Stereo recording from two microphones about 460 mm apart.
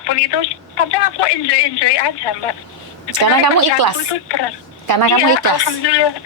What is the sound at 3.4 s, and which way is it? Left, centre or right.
Speech, right.